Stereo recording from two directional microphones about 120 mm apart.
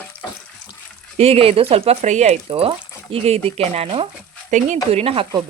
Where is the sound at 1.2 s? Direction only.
55° right (ahead or behind).